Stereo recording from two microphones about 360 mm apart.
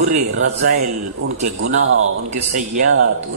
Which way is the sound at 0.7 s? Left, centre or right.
Right.